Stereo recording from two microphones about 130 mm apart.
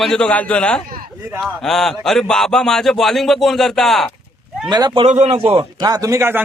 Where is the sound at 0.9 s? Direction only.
90° right.